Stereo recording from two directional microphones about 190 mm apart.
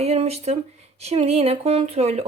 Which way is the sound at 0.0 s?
35° right (ahead or behind).